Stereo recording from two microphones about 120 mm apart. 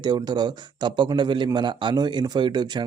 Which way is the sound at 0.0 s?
35° right (ahead or behind).